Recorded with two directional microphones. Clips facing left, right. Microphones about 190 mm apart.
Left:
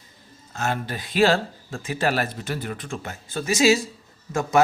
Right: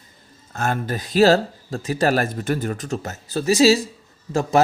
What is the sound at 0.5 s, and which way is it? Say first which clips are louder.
Speech: right 3 dB; 50° right (ahead or behind).